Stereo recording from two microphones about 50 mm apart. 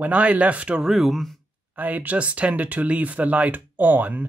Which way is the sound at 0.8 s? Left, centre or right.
Centre.